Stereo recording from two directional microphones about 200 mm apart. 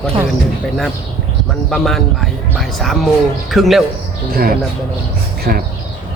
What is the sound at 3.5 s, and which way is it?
Speech, centre (ahead or behind).